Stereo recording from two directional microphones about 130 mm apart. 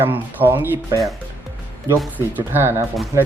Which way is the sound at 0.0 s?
15° right (ahead or behind).